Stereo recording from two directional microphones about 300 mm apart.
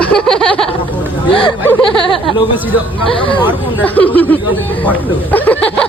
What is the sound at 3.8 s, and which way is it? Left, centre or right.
Speech, centre.